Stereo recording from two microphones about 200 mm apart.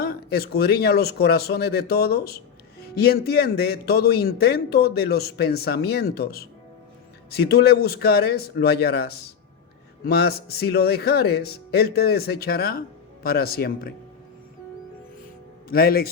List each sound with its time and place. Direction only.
0.0 s speech: 50° left (ahead or behind)
15.7 s speech: 50° left (ahead or behind)